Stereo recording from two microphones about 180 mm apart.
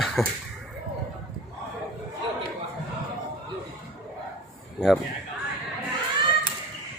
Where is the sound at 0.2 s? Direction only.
Centre (ahead or behind).